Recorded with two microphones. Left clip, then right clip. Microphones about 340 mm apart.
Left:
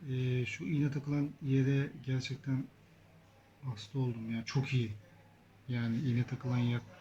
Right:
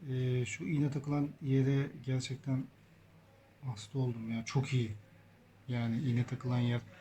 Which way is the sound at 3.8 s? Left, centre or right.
Centre.